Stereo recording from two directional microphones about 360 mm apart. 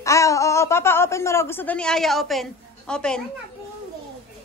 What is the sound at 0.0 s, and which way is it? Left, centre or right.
A woman's voice, centre.